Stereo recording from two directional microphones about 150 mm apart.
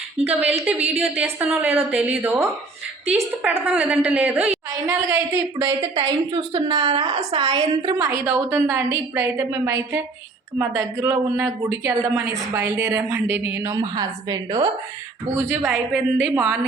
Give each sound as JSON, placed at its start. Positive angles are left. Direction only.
{"t": 0.5, "sound": "a woman's voice", "side_deg": -10}
{"t": 5.3, "sound": "speech", "side_deg": -30}
{"t": 6.5, "sound": "a woman's voice", "side_deg": -40}
{"t": 7.3, "sound": "a woman's voice", "side_deg": -35}
{"t": 7.9, "sound": "a woman's voice", "side_deg": -15}